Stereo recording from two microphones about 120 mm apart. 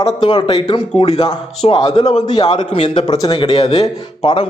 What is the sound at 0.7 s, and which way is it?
A man's voice, 50° left (ahead or behind).